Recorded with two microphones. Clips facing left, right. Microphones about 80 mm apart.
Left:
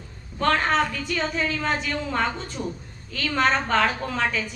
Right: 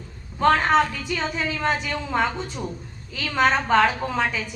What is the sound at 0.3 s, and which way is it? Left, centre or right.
A woman's voice, centre.